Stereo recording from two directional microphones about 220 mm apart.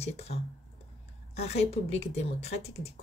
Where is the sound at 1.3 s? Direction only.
30° left (ahead or behind).